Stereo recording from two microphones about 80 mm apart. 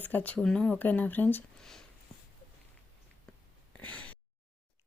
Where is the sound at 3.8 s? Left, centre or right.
Centre.